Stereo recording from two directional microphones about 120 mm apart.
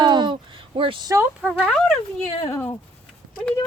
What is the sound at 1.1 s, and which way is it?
Speech, 25° right (ahead or behind).